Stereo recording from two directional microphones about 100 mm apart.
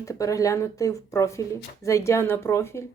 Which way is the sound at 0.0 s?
35° left (ahead or behind).